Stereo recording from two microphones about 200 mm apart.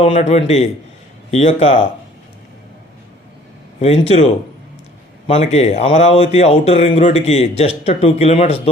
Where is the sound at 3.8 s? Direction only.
35° left (ahead or behind).